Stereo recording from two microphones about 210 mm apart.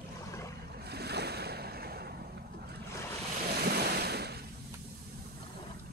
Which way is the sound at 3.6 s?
50° right (ahead or behind).